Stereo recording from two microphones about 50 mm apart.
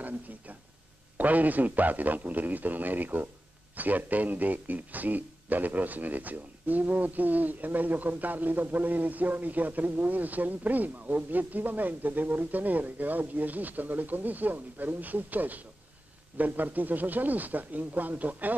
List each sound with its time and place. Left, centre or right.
1.1 s speech: right